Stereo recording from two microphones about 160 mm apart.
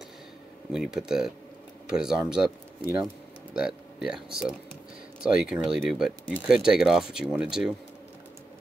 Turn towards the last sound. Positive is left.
turn(degrees=-5)  # may be behind; listen again after turning